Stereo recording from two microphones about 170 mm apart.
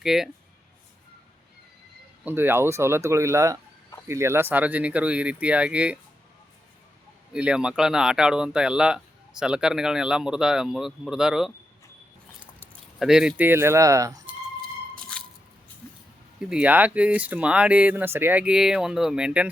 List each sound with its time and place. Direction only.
0.0 s speech: centre (ahead or behind)
2.2 s speech: 10° right (ahead or behind)
7.3 s speech: 5° right (ahead or behind)
13.0 s speech: 5° right (ahead or behind); by 14.2 s 20° right (ahead or behind)
14.6 s a sound: 5° left (ahead or behind)
16.4 s speech: 5° right (ahead or behind)